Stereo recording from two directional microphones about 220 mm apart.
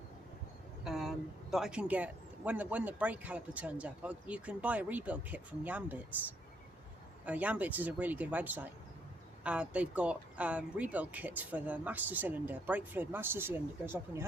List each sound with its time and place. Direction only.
0.9 s speech: centre (ahead or behind)
7.3 s speech: 5° right (ahead or behind)